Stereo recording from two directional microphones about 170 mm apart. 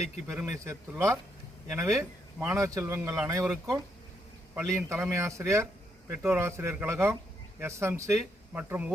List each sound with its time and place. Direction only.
0.3 s speech: 5° right (ahead or behind)
0.6 s a man's voice: 15° right (ahead or behind)
4.5 s a man's voice: 15° right (ahead or behind)